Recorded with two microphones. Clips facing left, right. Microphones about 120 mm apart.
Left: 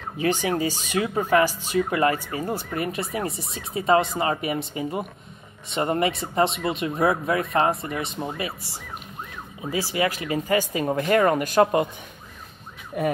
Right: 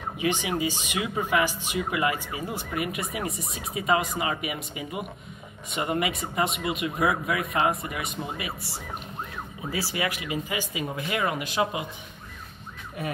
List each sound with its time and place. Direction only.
0.2 s speech: 40° left (ahead or behind)
9.7 s speech: 25° left (ahead or behind); by 11.9 s 50° left (ahead or behind)